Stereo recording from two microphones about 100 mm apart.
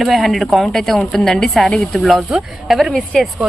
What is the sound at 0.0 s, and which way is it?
A woman's voice, centre (ahead or behind).